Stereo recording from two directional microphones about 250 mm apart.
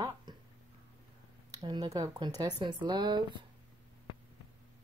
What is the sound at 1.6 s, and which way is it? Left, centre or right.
Speech, centre.